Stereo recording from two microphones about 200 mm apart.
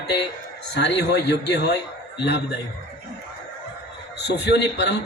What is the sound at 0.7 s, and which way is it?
A man's voice, 60° left (ahead or behind).